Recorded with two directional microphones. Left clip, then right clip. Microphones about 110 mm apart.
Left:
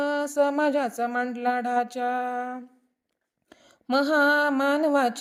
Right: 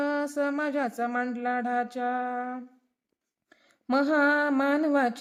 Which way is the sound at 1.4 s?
45° left (ahead or behind).